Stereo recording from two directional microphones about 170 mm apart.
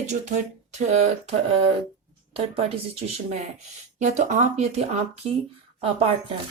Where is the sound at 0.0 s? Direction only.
45° right (ahead or behind).